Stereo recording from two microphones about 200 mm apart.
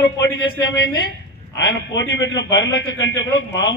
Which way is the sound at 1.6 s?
60° left (ahead or behind).